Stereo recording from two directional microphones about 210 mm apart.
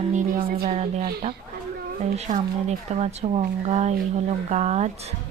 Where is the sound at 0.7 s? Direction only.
30° right (ahead or behind).